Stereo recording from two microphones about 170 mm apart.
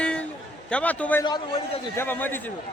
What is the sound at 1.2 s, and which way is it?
Speech, 25° left (ahead or behind).